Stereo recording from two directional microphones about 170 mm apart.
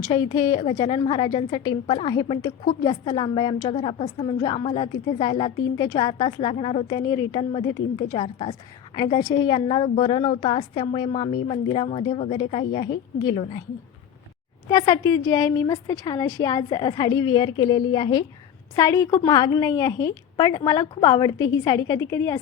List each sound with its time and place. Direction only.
0.0 s a woman's voice: 25° left (ahead or behind)
14.7 s a woman's voice: 20° left (ahead or behind)